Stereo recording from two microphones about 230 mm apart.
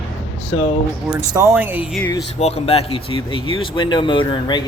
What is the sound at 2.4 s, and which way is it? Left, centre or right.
Speech, left.